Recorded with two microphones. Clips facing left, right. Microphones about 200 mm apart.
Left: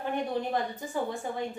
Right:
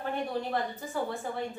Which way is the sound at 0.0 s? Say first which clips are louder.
Left 2 dB; 15° left (ahead or behind).